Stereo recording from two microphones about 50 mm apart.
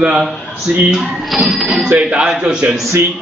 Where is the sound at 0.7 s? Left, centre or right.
Right.